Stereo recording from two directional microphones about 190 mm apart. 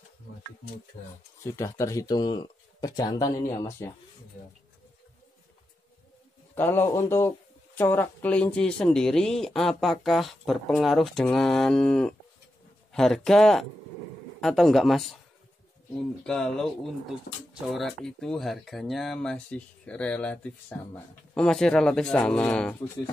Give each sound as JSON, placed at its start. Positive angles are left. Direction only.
{"t": 1.4, "sound": "speech", "side_deg": 15}
{"t": 6.5, "sound": "speech", "side_deg": 10}